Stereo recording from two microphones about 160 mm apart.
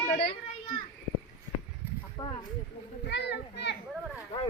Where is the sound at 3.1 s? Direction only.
90° left.